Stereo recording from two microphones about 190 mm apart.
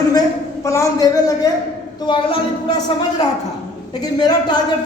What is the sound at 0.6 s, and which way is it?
Speech, 15° left (ahead or behind).